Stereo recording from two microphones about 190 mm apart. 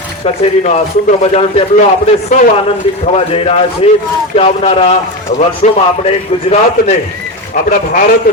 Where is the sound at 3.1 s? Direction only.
30° left (ahead or behind).